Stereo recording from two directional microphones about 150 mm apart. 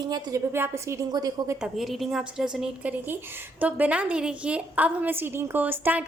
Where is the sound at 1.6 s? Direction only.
Centre (ahead or behind).